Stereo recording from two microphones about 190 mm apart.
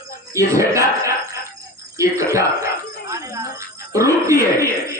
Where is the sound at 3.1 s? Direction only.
15° right (ahead or behind).